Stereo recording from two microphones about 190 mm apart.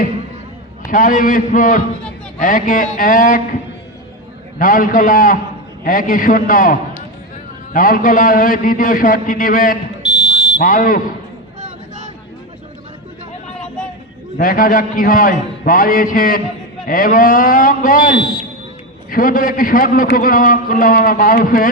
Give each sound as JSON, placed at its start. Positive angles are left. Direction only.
{"t": 0.9, "sound": "a man's voice", "side_deg": 45}
{"t": 10.0, "sound": "fire alarm", "side_deg": 25}
{"t": 10.6, "sound": "a man's voice", "side_deg": 45}
{"t": 14.3, "sound": "a man's voice", "side_deg": 45}